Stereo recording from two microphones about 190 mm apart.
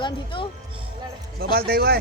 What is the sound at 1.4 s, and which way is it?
Speech, 50° right (ahead or behind).